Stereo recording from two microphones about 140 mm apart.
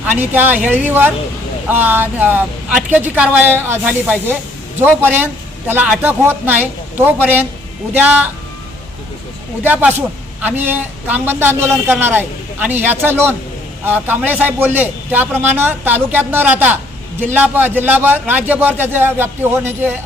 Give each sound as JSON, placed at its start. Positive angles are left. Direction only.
{"t": 0.0, "sound": "a man's voice", "side_deg": -15}
{"t": 9.6, "sound": "a man's voice", "side_deg": -15}